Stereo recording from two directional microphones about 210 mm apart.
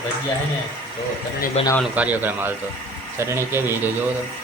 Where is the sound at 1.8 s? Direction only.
5° right (ahead or behind).